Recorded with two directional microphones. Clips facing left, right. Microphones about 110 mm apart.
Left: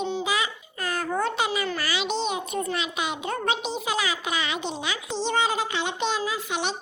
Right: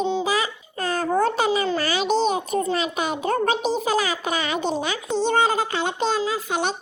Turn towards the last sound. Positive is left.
turn(degrees=-45)  # may be behind; listen again after turning